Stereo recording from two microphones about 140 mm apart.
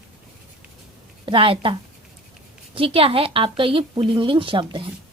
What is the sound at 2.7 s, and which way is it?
A woman's voice, 40° right (ahead or behind).